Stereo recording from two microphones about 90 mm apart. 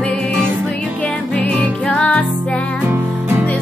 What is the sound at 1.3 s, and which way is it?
Music, 10° left (ahead or behind).